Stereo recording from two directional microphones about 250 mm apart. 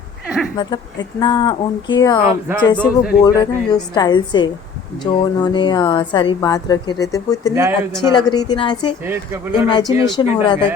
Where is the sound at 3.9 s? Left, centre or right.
Centre.